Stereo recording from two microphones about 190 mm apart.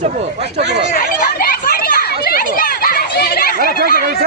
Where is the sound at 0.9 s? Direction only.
50° left (ahead or behind).